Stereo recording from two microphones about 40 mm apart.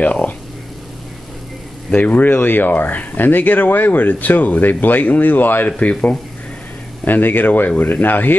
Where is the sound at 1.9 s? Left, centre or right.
Left.